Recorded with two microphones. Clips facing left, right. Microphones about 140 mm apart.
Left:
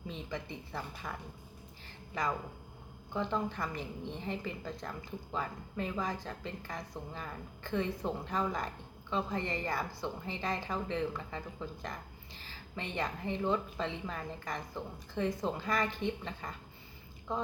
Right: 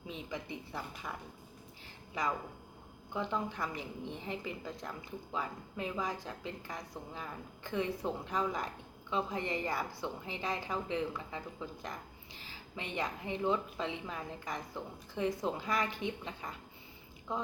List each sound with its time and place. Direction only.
0.1 s a woman's voice: 10° right (ahead or behind)
3.2 s a woman's voice: 5° right (ahead or behind)